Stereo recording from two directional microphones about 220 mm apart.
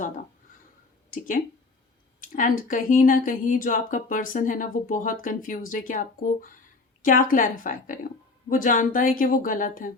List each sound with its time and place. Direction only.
2.3 s speech: 35° left (ahead or behind)